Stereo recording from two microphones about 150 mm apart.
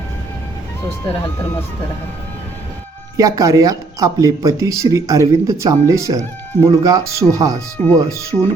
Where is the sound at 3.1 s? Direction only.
20° right (ahead or behind).